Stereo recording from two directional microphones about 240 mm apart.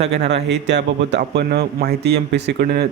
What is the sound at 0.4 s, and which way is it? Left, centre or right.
Speech, right.